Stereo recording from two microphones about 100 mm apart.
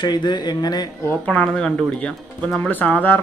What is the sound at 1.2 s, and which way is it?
Speech, 10° left (ahead or behind).